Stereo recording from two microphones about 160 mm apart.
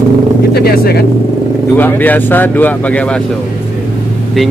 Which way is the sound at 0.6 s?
80° left.